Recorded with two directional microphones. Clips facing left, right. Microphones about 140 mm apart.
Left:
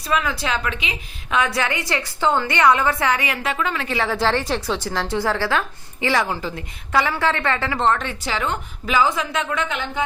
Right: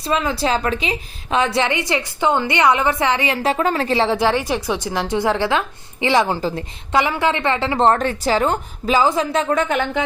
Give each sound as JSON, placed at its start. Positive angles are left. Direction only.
{"t": 0.0, "sound": "a woman's voice", "side_deg": -30}
{"t": 4.2, "sound": "a woman's voice", "side_deg": -15}
{"t": 6.9, "sound": "a woman's voice", "side_deg": -20}
{"t": 7.8, "sound": "a woman's voice", "side_deg": -40}